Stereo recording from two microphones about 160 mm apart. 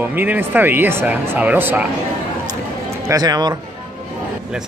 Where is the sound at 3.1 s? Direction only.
25° right (ahead or behind).